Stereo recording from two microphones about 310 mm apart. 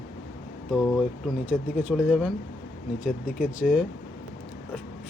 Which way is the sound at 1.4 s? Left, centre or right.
Centre.